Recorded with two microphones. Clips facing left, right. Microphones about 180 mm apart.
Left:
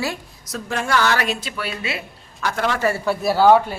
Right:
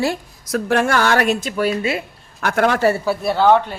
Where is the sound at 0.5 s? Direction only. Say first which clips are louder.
Right 5 dB; 60° right (ahead or behind).